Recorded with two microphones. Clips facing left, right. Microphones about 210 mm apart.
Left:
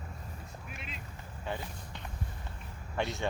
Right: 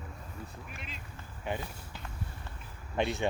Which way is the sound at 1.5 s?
15° right (ahead or behind).